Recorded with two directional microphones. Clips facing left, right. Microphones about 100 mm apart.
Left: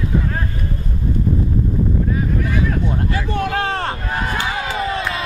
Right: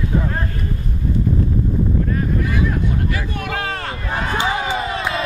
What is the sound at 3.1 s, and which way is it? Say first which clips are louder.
Speech: left 4 dB; 30° left (ahead or behind).